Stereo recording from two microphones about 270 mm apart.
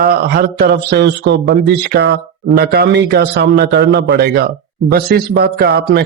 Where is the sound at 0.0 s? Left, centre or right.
Right.